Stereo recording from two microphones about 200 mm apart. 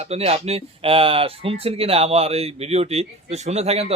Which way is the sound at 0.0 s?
30° right (ahead or behind).